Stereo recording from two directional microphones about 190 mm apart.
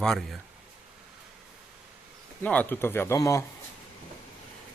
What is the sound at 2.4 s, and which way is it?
Speech, 10° left (ahead or behind).